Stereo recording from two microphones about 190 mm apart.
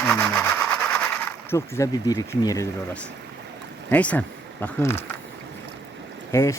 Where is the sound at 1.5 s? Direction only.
15° left (ahead or behind).